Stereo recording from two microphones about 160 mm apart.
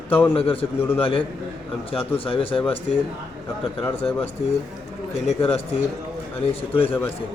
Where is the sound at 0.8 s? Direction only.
15° left (ahead or behind).